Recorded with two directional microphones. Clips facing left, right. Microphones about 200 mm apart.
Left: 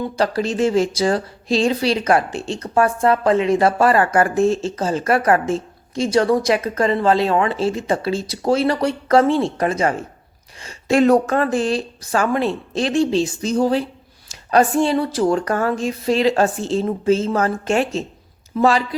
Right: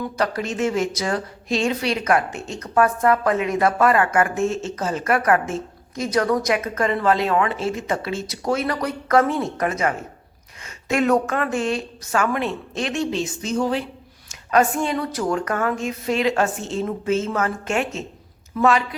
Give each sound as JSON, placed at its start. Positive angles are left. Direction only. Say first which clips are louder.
{"t": 0.0, "sound": "a woman's voice", "louder": "left 4 dB", "side_deg": 30}